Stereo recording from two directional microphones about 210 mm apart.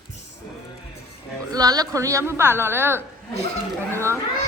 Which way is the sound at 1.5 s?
20° right (ahead or behind).